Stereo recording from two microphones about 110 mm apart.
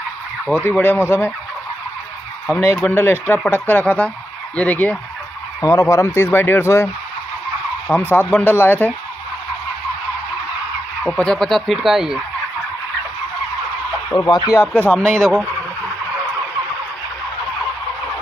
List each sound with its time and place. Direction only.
0.5 s speech: 15° left (ahead or behind)
2.9 s speech: 20° left (ahead or behind)
5.6 s speech: 30° left (ahead or behind)
7.9 s speech: 15° left (ahead or behind)
11.1 s speech: 5° left (ahead or behind)
14.1 s speech: 35° left (ahead or behind)
14.7 s speech: 10° left (ahead or behind)